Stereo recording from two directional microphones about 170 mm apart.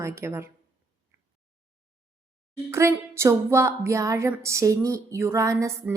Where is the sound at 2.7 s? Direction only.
15° right (ahead or behind).